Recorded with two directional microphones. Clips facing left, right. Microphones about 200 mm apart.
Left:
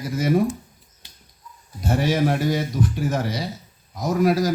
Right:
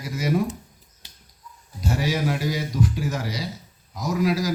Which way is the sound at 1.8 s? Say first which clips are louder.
Left 4 dB; 55° left (ahead or behind).